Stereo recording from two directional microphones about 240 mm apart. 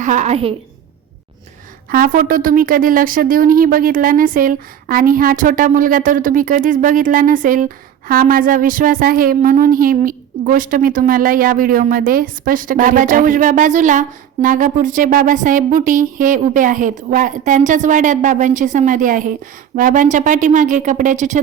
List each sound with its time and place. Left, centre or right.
0.0 s a woman's voice: right
1.9 s a woman's voice: right